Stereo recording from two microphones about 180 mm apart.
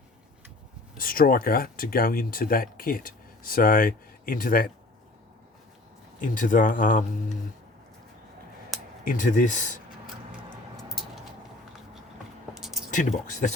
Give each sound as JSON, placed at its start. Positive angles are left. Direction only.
{"t": 0.9, "sound": "speech", "side_deg": 55}
{"t": 6.1, "sound": "speech", "side_deg": 45}
{"t": 9.0, "sound": "speech", "side_deg": 45}
{"t": 10.8, "sound": "a sound", "side_deg": 0}
{"t": 12.5, "sound": "a sound", "side_deg": 0}
{"t": 12.9, "sound": "speech", "side_deg": 45}